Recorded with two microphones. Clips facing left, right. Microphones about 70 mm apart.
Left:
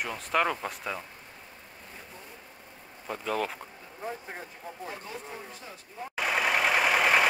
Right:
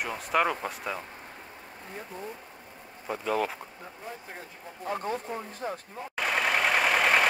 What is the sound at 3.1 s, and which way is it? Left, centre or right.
Speech, centre.